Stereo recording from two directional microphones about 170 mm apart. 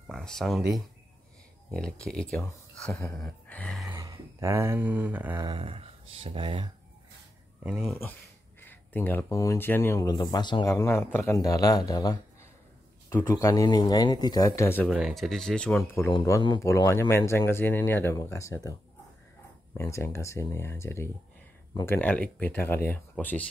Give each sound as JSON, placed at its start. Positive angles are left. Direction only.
{"t": 0.0, "sound": "speech", "side_deg": 0}
{"t": 3.0, "sound": "a sound", "side_deg": 5}
{"t": 3.9, "sound": "a sound", "side_deg": -20}
{"t": 5.4, "sound": "speech", "side_deg": -30}
{"t": 7.6, "sound": "speech", "side_deg": 0}
{"t": 8.5, "sound": "a man's voice", "side_deg": 10}
{"t": 13.3, "sound": "a man's voice", "side_deg": 20}
{"t": 14.9, "sound": "speech", "side_deg": 0}
{"t": 16.1, "sound": "speech", "side_deg": 25}
{"t": 19.8, "sound": "speech", "side_deg": 15}